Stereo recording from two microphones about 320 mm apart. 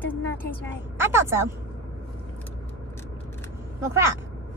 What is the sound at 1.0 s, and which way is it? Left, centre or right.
Speech, centre.